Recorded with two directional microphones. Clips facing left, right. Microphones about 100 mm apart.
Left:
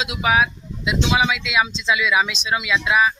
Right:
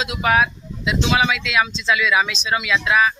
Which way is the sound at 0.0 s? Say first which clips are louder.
Right 1 dB; 5° left (ahead or behind).